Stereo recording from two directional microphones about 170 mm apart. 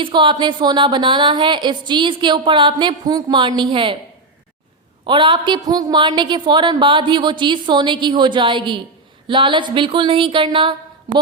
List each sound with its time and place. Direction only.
0.0 s speech: 30° right (ahead or behind)
5.0 s speech: 30° right (ahead or behind)